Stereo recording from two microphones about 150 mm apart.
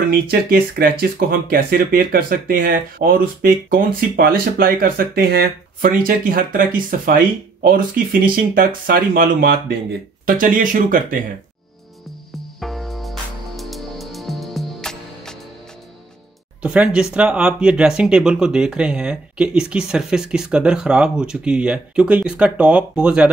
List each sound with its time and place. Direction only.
0.3 s speech: 80° right; by 11.1 s 65° right (ahead or behind)
12.5 s music: centre (ahead or behind)
16.6 s speech: 5° right (ahead or behind)